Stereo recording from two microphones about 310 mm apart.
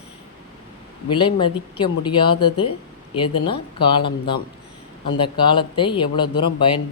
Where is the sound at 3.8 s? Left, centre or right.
Centre.